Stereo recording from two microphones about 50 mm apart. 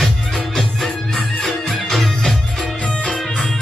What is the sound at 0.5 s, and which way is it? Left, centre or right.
Music, centre.